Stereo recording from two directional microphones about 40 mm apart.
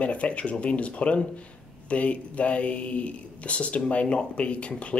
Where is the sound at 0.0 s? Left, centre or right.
Left.